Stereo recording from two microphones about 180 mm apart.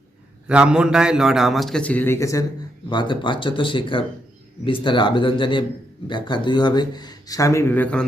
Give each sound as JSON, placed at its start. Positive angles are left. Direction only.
{"t": 0.4, "sound": "a man's voice", "side_deg": -5}